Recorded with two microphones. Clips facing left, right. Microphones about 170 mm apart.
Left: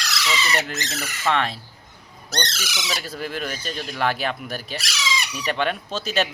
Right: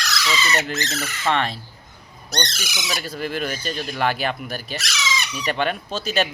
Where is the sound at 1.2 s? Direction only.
Centre (ahead or behind).